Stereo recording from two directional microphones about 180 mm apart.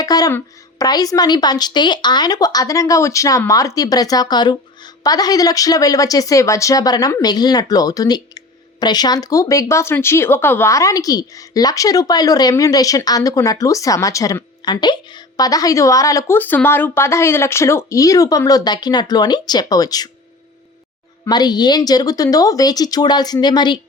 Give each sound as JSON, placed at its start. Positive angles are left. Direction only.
{"t": 0.0, "sound": "a woman's voice", "side_deg": 20}
{"t": 21.2, "sound": "a woman's voice", "side_deg": 25}